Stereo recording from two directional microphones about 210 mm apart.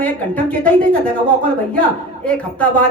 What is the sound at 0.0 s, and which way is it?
A woman's voice, 5° left (ahead or behind).